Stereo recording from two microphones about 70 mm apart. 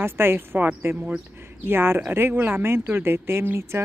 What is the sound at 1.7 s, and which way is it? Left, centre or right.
A woman's voice, right.